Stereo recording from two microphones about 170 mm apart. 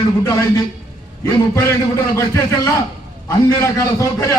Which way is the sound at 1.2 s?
20° left (ahead or behind).